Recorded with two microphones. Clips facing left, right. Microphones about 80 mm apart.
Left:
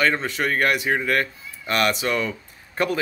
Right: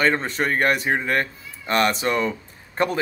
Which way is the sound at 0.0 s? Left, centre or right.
Right.